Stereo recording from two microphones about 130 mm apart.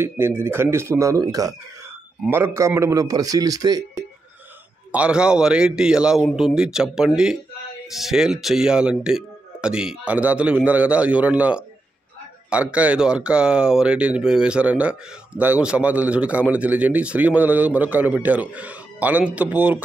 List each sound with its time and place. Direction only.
0.4 s a man's voice: 20° right (ahead or behind)
2.2 s a man's voice: 15° right (ahead or behind)
4.9 s speech: 10° right (ahead or behind)